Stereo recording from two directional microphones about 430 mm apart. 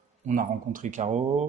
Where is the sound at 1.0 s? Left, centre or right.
Centre.